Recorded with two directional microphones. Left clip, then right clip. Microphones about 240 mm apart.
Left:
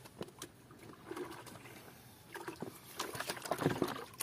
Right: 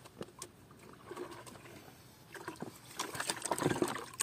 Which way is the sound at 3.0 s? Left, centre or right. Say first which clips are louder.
Right 2 dB; right.